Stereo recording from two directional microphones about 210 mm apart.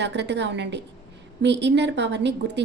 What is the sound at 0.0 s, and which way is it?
A woman's voice, 55° right (ahead or behind).